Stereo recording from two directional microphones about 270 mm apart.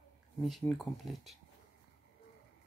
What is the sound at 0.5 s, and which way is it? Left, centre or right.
Speech, centre.